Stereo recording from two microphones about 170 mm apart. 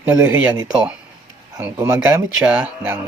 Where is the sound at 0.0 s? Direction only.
10° right (ahead or behind).